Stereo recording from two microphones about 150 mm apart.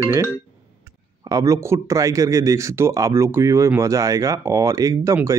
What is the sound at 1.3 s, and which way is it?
Speech, 20° right (ahead or behind).